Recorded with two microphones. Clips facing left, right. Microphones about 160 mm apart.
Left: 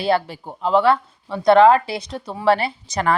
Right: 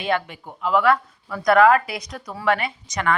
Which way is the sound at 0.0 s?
35° left (ahead or behind).